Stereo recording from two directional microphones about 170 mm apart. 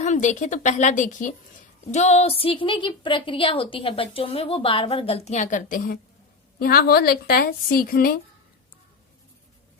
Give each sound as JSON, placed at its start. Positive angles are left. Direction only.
{"t": 0.0, "sound": "a woman's voice", "side_deg": 45}